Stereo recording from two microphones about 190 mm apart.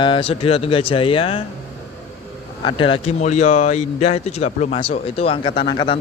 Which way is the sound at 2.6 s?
25° left (ahead or behind).